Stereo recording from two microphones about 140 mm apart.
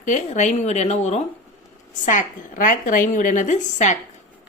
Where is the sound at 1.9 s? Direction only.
65° left (ahead or behind).